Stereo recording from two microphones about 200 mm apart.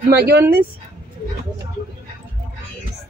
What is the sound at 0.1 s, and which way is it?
Speech, 55° right (ahead or behind).